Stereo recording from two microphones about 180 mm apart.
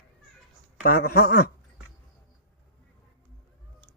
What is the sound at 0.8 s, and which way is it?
Speech, 60° left (ahead or behind).